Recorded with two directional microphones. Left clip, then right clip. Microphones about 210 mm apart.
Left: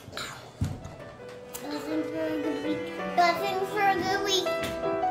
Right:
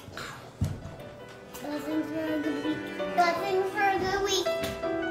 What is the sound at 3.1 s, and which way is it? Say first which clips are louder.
Speech: left 2 dB; 45° left (ahead or behind).